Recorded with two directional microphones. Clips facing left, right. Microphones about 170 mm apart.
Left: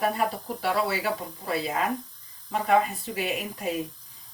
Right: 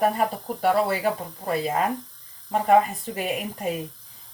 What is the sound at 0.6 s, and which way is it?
Speech, 50° right (ahead or behind).